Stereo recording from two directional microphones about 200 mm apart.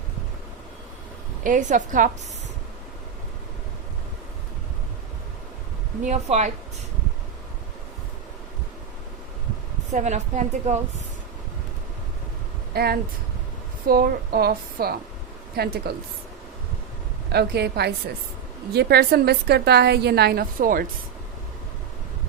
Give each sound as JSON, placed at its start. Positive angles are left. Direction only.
{"t": 1.5, "sound": "a woman's voice", "side_deg": -40}
{"t": 6.1, "sound": "a woman's voice", "side_deg": -35}
{"t": 9.9, "sound": "a woman's voice", "side_deg": -35}
{"t": 12.7, "sound": "a woman's voice", "side_deg": -50}
{"t": 17.3, "sound": "a woman's voice", "side_deg": -55}